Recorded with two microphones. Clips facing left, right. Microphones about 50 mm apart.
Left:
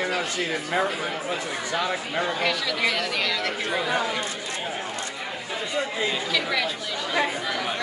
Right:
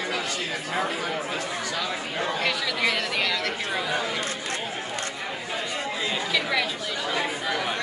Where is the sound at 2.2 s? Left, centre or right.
Centre.